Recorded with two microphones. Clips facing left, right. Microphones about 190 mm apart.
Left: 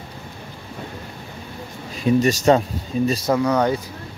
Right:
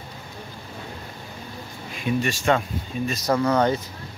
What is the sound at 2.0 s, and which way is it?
Speech, 40° left (ahead or behind).